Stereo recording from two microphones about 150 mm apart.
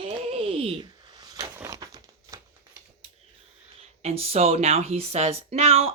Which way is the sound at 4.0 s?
45° right (ahead or behind).